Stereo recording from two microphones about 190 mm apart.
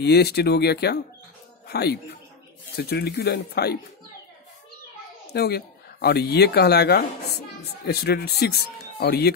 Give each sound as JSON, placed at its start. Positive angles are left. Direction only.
{"t": 0.0, "sound": "a man's voice", "side_deg": 60}
{"t": 5.3, "sound": "speech", "side_deg": 55}